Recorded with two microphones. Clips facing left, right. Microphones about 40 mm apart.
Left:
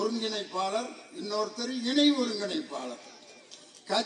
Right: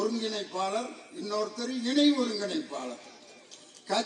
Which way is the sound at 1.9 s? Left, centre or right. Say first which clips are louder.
Even; left.